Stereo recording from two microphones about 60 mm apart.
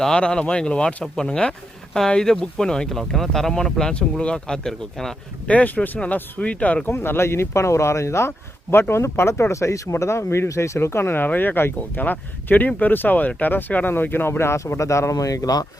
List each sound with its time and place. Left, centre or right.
0.0 s speech: centre
5.5 s speech: left
6.9 s speech: left
8.7 s speech: left
14.8 s speech: left
15.1 s speech: left